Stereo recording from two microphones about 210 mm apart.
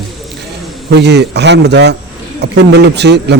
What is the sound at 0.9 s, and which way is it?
A man's voice, 55° right (ahead or behind).